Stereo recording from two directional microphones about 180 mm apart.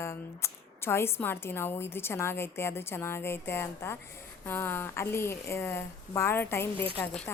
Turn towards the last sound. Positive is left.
turn(degrees=10)  # may be behind; listen again after turning